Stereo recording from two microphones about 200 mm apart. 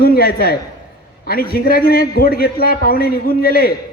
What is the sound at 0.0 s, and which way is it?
A man's voice, 50° left (ahead or behind).